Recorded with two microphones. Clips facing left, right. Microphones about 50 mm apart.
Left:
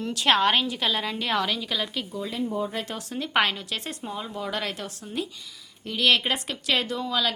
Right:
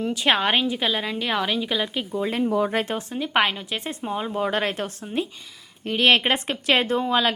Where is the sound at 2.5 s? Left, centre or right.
Right.